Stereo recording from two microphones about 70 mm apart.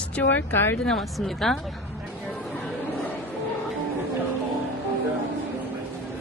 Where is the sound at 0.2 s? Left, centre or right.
Left.